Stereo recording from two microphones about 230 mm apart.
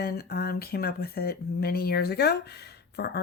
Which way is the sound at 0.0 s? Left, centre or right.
Left.